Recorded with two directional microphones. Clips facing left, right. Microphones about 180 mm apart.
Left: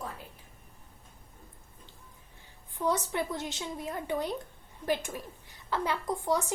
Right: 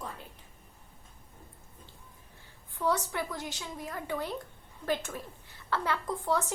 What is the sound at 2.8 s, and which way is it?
A woman's voice, 20° left (ahead or behind).